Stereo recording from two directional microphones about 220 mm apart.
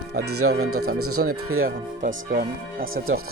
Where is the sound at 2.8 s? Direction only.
65° right (ahead or behind).